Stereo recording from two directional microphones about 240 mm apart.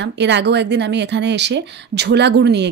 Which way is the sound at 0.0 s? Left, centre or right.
Right.